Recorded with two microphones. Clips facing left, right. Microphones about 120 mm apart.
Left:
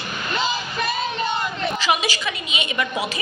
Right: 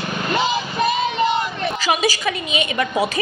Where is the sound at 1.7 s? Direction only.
45° right (ahead or behind).